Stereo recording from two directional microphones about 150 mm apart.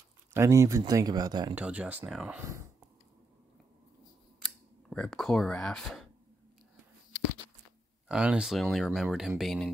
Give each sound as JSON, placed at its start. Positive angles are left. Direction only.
{"t": 0.3, "sound": "speech", "side_deg": -20}
{"t": 1.5, "sound": "speech", "side_deg": -10}
{"t": 4.4, "sound": "speech", "side_deg": 5}
{"t": 8.1, "sound": "speech", "side_deg": -5}